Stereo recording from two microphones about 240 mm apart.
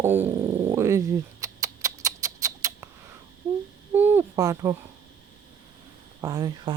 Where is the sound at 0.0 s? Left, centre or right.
Centre.